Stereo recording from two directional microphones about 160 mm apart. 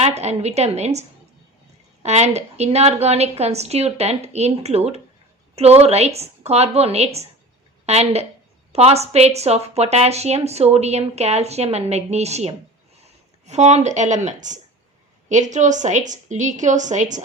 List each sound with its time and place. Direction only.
0.0 s a woman's voice: 45° right (ahead or behind)
2.0 s a woman's voice: 45° right (ahead or behind)